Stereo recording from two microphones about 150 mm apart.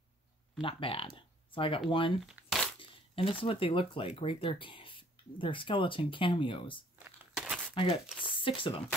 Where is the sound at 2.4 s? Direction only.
10° right (ahead or behind).